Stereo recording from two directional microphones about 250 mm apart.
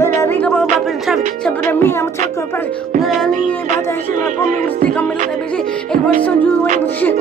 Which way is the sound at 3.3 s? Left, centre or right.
Right.